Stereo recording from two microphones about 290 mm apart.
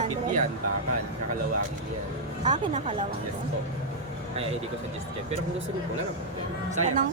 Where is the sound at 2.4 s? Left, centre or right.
Right.